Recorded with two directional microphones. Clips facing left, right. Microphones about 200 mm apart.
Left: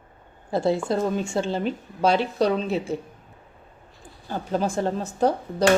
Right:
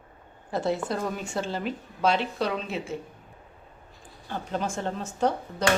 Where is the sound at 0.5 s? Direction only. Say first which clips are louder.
Left 5 dB; 30° left (ahead or behind).